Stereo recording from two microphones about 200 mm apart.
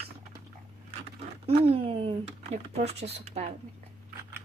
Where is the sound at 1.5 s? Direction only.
30° right (ahead or behind).